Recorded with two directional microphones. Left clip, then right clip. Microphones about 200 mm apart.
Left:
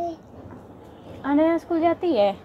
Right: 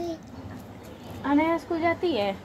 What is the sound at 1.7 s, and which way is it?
Speech, 50° left (ahead or behind).